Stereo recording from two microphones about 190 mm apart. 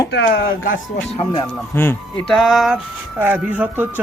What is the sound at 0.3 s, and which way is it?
Speech, 45° left (ahead or behind).